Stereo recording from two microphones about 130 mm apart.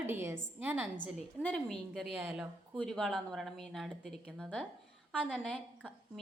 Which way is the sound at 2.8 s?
5° left (ahead or behind).